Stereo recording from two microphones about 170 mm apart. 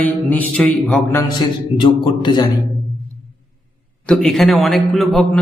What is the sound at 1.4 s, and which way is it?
A man's voice, 25° left (ahead or behind).